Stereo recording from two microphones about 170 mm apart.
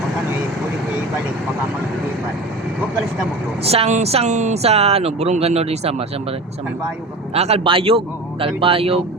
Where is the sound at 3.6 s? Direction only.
35° right (ahead or behind).